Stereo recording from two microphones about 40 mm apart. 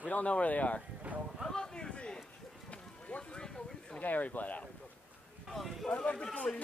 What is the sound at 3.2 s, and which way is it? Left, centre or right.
Speech, left.